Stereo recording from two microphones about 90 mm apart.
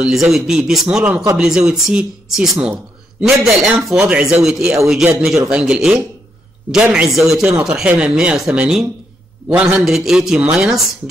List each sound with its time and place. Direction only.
0.0 s speech: 5° right (ahead or behind)